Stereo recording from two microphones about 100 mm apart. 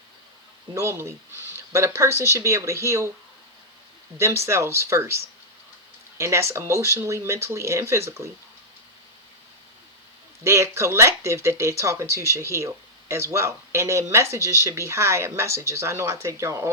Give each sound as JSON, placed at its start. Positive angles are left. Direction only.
{"t": 0.7, "sound": "speech", "side_deg": -30}
{"t": 4.2, "sound": "speech", "side_deg": -25}
{"t": 10.4, "sound": "speech", "side_deg": -30}